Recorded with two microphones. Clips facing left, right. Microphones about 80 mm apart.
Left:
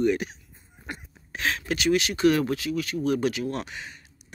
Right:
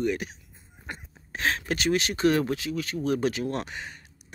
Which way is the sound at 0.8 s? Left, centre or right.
Right.